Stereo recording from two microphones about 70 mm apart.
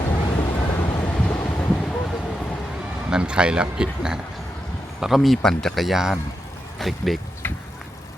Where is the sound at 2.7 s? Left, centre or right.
Centre.